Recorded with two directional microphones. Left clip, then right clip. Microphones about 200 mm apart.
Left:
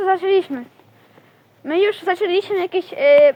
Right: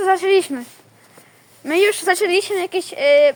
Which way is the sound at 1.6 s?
15° right (ahead or behind).